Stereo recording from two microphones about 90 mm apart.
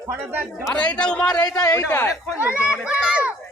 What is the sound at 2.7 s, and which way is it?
Speech, 10° right (ahead or behind).